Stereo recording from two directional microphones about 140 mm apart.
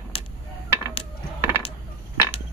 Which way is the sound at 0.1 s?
40° left (ahead or behind).